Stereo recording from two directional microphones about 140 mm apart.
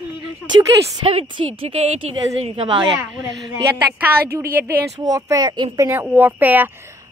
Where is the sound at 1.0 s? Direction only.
40° right (ahead or behind).